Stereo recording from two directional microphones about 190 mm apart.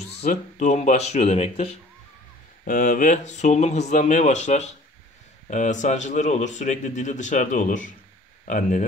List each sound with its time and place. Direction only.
0.2 s speech: 40° left (ahead or behind)
2.6 s speech: 45° left (ahead or behind)